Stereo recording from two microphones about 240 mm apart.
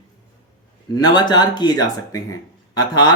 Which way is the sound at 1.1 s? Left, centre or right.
Centre.